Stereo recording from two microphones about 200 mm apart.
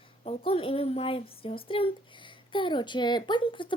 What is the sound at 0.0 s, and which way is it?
A woman's voice, 30° left (ahead or behind).